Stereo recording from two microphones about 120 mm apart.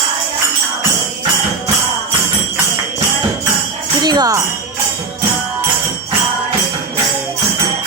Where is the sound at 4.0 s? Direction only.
35° right (ahead or behind).